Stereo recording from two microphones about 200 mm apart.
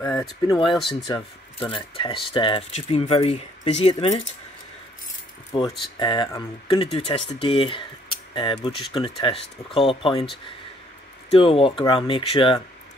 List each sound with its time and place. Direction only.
0.0 s speech: 15° left (ahead or behind); by 4.1 s 30° left (ahead or behind)
5.5 s speech: 25° left (ahead or behind)
11.2 s speech: 25° left (ahead or behind)